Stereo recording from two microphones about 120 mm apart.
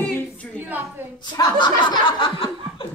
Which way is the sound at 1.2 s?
35° left (ahead or behind).